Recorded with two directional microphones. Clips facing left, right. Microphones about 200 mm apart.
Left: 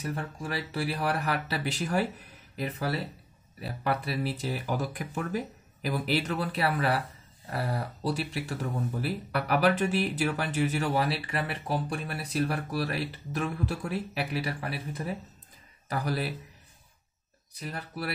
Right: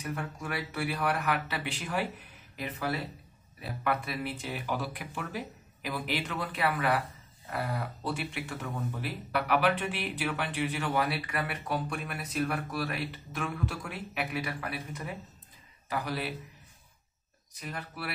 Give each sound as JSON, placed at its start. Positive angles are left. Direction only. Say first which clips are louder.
{"t": 0.0, "sound": "a man's voice", "louder": "left 2 dB", "side_deg": 30}
{"t": 17.6, "sound": "speech", "louder": "left 3 dB", "side_deg": 35}